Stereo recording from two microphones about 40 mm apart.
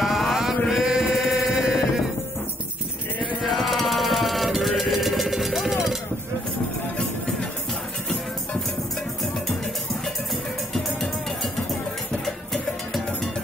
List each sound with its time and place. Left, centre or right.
0.0 s a sound: centre
0.7 s chant: centre
3.4 s music: centre